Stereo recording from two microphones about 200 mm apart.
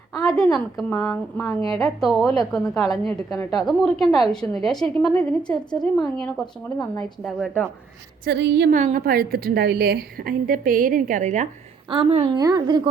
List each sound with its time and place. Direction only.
0.1 s a woman's voice: 5° left (ahead or behind)
8.2 s a woman's voice: 55° right (ahead or behind)
8.7 s a woman's voice: 40° right (ahead or behind)
12.4 s a woman's voice: 20° right (ahead or behind)